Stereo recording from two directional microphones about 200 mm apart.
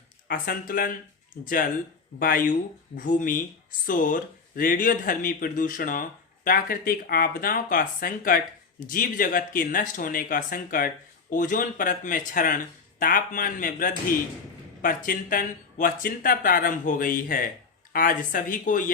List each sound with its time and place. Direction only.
0.3 s speech: 45° left (ahead or behind)